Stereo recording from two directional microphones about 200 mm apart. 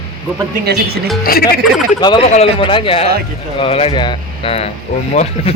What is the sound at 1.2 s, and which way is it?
Speech, 50° left (ahead or behind).